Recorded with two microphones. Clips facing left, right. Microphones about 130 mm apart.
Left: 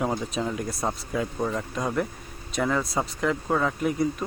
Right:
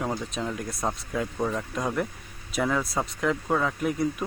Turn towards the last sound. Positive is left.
turn(degrees=0)  # may be behind; listen again after turning